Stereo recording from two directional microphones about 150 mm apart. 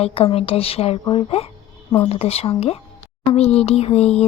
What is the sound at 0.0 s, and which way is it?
Speech, 40° left (ahead or behind).